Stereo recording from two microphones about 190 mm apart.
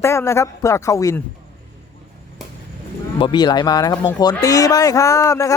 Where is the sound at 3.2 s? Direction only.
25° left (ahead or behind).